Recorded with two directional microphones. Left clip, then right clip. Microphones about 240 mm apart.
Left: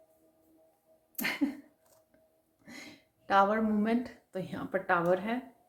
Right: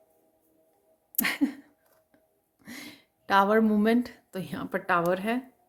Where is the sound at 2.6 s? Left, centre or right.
Right.